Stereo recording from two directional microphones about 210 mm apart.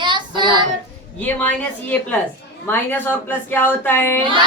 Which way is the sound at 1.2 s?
10° left (ahead or behind).